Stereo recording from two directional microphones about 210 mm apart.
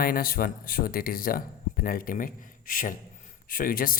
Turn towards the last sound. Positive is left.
turn(degrees=40)  # may be behind; listen again after turning